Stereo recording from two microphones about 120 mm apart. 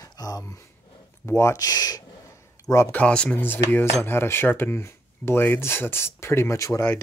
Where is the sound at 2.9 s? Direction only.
10° left (ahead or behind); by 6.8 s 25° left (ahead or behind).